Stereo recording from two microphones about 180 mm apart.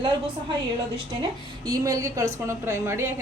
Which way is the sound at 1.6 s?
20° right (ahead or behind).